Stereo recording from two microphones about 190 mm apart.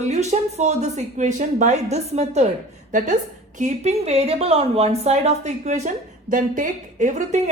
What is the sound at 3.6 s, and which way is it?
A woman's voice, 35° right (ahead or behind).